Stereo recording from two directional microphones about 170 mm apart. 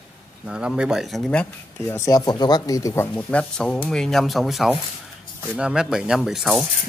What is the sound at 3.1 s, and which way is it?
Speech, 5° left (ahead or behind).